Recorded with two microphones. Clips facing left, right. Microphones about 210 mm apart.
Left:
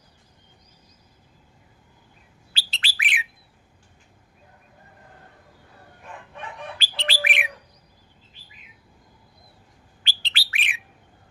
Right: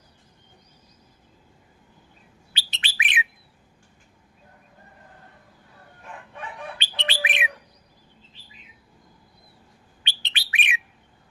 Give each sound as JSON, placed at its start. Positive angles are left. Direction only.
{"t": 2.5, "sound": "bird", "side_deg": -20}
{"t": 6.7, "sound": "bird", "side_deg": -20}
{"t": 10.0, "sound": "bird", "side_deg": -20}